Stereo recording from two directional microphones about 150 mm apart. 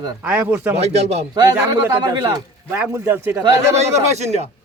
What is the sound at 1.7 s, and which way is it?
Speech, 25° right (ahead or behind).